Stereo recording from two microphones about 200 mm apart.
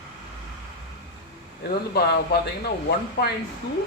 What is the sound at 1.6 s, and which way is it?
A man's voice, 50° left (ahead or behind).